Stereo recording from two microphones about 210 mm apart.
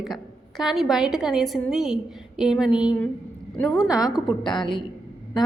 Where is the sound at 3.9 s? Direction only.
15° left (ahead or behind).